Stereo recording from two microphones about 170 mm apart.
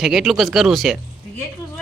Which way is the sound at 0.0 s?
Centre (ahead or behind).